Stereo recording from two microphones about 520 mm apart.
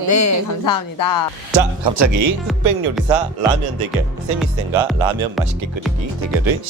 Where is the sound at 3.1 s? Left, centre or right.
Right.